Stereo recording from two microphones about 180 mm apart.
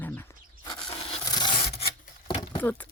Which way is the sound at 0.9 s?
35° left (ahead or behind).